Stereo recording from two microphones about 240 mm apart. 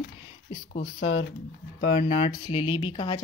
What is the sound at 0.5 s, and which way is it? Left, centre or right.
Speech, left.